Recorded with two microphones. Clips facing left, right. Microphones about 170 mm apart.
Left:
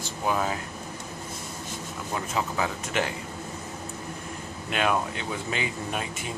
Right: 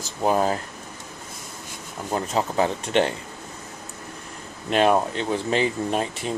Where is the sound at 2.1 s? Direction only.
35° right (ahead or behind).